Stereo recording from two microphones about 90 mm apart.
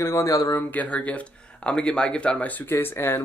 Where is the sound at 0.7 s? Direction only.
15° left (ahead or behind).